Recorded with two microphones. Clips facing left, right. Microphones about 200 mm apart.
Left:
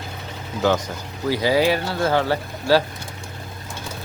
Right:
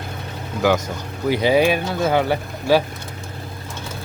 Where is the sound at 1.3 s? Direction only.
20° right (ahead or behind).